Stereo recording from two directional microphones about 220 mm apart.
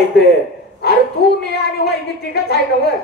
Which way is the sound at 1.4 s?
45° left (ahead or behind).